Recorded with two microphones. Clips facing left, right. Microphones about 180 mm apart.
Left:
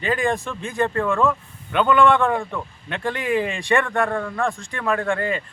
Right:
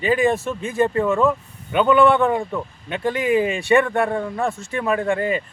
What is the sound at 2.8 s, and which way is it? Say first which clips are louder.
Speech: right 4 dB; 5° right (ahead or behind).